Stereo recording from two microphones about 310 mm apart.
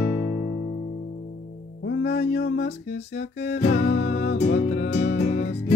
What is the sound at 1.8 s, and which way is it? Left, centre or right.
Music, left.